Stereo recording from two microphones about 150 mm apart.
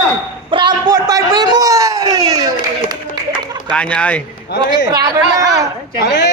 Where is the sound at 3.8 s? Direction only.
5° left (ahead or behind).